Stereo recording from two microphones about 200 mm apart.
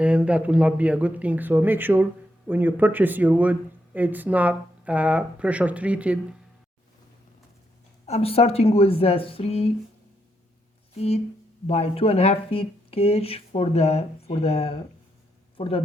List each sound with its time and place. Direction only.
0.0 s speech: 5° right (ahead or behind)
8.0 s speech: 30° left (ahead or behind)
10.9 s speech: 30° left (ahead or behind)